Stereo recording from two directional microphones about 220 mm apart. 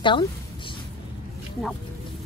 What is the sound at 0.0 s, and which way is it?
Speech, 20° left (ahead or behind).